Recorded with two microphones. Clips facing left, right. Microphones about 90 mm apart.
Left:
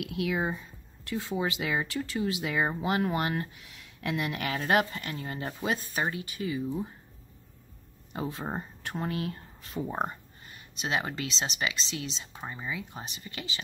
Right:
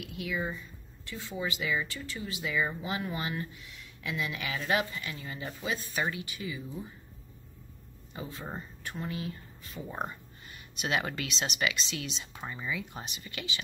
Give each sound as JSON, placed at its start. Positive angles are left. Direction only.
{"t": 0.0, "sound": "a woman's voice", "side_deg": 85}
{"t": 1.4, "sound": "speech", "side_deg": 70}
{"t": 2.6, "sound": "speech", "side_deg": 60}
{"t": 6.3, "sound": "speech", "side_deg": 50}
{"t": 8.1, "sound": "speech", "side_deg": 60}
{"t": 10.8, "sound": "speech", "side_deg": 25}